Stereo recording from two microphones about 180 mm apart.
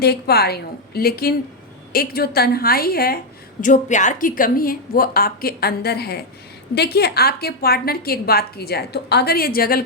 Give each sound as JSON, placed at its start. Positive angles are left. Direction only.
{"t": 0.0, "sound": "a woman's voice", "side_deg": 60}
{"t": 3.6, "sound": "a woman's voice", "side_deg": 45}